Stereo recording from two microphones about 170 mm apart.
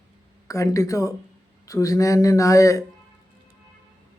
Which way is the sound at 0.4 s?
20° left (ahead or behind).